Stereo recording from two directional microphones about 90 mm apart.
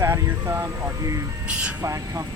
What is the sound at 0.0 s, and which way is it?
Speech, 30° right (ahead or behind).